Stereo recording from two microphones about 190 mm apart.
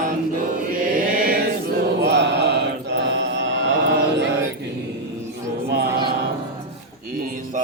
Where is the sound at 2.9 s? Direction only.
70° right (ahead or behind).